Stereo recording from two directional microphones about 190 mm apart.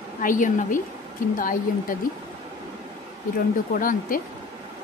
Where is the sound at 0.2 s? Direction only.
45° left (ahead or behind).